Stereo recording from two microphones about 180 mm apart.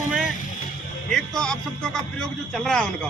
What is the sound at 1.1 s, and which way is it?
Speech, 5° left (ahead or behind).